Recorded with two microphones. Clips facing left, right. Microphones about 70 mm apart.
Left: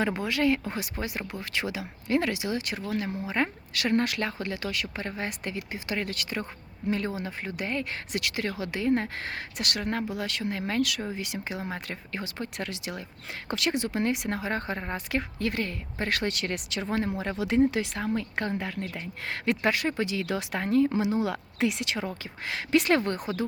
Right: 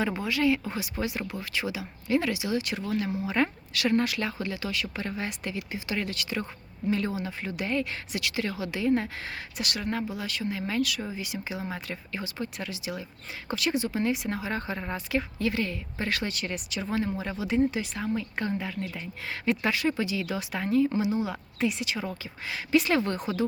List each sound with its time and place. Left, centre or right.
0.0 s speech: left
3.2 s speech: left
3.8 s speech: left
17.2 s speech: left
20.9 s speech: left